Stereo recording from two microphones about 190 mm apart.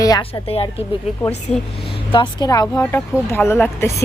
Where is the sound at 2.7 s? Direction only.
10° left (ahead or behind).